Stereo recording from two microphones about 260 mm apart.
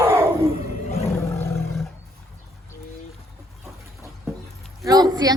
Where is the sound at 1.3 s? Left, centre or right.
Centre.